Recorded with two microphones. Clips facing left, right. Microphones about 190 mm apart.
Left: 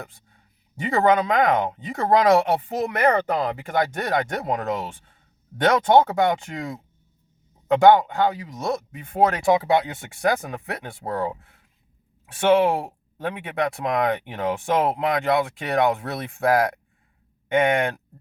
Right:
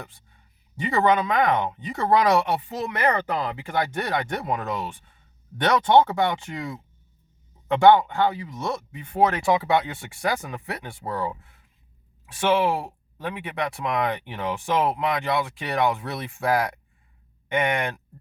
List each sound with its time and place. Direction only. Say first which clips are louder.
0.9 s speech: left 2 dB; 50° left (ahead or behind)